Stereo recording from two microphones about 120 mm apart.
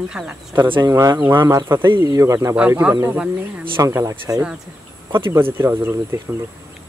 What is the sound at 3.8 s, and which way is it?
Speech, 25° right (ahead or behind).